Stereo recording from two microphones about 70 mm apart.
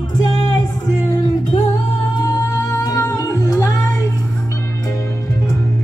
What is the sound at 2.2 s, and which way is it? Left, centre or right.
Music, left.